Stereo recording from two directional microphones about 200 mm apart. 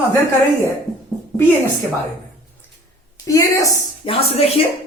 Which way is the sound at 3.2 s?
15° left (ahead or behind).